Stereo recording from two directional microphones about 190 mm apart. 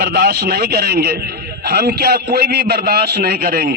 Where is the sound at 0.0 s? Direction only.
55° right (ahead or behind).